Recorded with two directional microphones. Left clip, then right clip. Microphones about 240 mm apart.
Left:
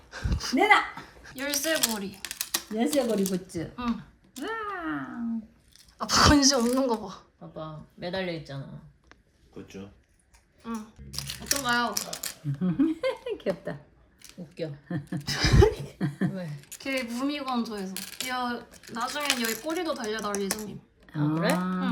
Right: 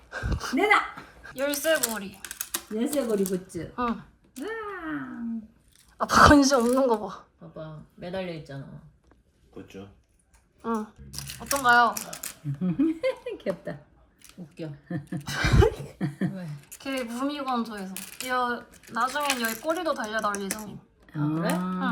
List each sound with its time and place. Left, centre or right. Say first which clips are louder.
0.1 s a sound: right 1 dB; centre
2.2 s speech: left 3 dB; centre
4.4 s a sound: left 1 dB; centre
6.0 s speech: right 4 dB; centre
7.9 s speech: left 2 dB; left
10.6 s speech: right 8 dB; centre
14.8 s speech: left 1 dB; centre